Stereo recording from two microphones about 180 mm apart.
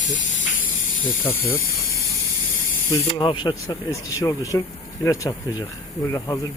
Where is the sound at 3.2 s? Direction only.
25° left (ahead or behind).